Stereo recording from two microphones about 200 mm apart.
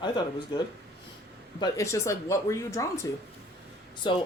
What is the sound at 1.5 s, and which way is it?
Speech, 20° left (ahead or behind).